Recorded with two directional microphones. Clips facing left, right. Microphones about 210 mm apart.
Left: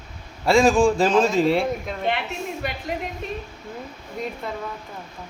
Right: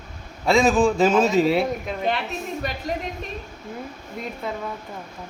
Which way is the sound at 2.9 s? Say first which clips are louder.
Right 2 dB; 40° right (ahead or behind).